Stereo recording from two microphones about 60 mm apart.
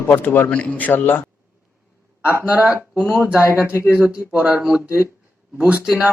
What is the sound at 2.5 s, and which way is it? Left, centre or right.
Speech, right.